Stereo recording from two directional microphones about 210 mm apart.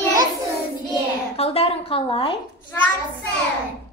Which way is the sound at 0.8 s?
30° left (ahead or behind).